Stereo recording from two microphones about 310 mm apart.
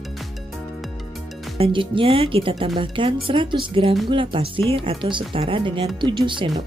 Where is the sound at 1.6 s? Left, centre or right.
Centre.